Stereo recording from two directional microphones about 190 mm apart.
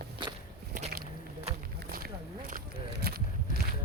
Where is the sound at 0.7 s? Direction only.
45° right (ahead or behind).